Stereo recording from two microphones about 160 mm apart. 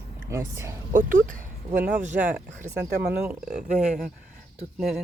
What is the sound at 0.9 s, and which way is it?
Speech, 55° right (ahead or behind).